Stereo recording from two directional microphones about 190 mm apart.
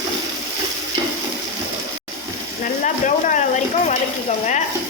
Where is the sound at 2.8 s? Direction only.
40° left (ahead or behind).